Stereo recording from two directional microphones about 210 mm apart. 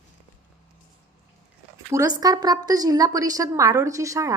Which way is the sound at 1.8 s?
15° right (ahead or behind).